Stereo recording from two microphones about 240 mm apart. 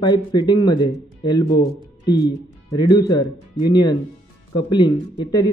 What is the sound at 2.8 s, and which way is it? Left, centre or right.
Speech, centre.